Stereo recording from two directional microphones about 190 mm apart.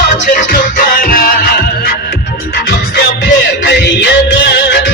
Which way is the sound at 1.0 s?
50° left (ahead or behind).